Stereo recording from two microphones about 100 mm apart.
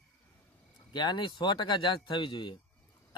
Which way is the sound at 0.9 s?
50° left (ahead or behind).